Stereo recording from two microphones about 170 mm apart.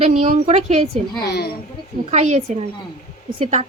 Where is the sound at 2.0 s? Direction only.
40° right (ahead or behind).